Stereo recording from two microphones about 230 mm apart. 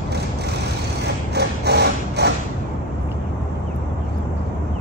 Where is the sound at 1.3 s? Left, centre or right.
Right.